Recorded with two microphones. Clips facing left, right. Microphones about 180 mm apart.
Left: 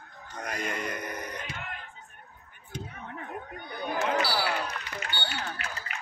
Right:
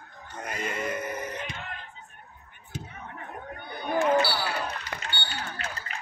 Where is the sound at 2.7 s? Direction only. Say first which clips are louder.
Even; 5° right (ahead or behind).